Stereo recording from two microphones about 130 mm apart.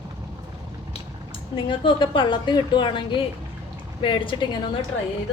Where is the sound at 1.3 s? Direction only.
40° left (ahead or behind).